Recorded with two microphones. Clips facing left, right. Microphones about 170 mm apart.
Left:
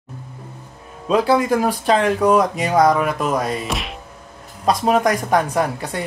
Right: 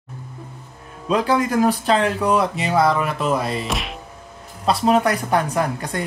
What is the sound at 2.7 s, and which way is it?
Speech, 15° left (ahead or behind).